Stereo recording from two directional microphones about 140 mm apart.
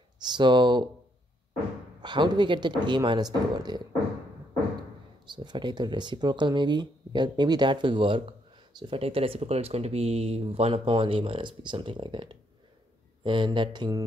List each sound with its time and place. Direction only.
0.2 s speech: 35° right (ahead or behind)
2.0 s speech: 30° right (ahead or behind)
5.2 s speech: 30° right (ahead or behind)